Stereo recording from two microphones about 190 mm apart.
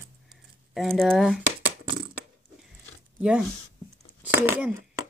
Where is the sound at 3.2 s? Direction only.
5° right (ahead or behind).